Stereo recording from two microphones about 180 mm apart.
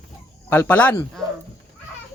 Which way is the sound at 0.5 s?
10° left (ahead or behind).